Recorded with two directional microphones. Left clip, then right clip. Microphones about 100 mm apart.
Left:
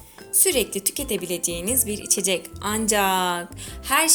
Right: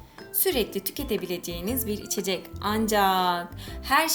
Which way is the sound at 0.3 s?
30° left (ahead or behind).